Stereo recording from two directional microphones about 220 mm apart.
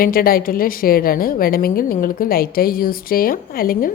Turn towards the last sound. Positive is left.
turn(degrees=40)  # may be behind; listen again after turning